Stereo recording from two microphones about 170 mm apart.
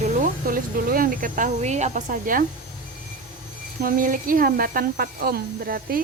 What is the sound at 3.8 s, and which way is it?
Speech, 55° right (ahead or behind).